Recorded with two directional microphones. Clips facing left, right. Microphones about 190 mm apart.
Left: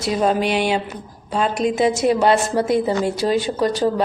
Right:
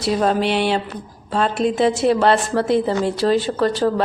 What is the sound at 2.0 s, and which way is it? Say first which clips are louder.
A woman's voice: even; 10° left (ahead or behind).